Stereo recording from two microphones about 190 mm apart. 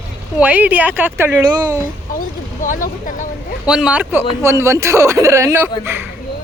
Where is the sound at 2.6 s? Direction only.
45° left (ahead or behind).